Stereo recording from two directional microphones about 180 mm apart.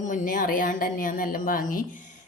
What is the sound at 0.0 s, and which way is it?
Speech, 45° left (ahead or behind).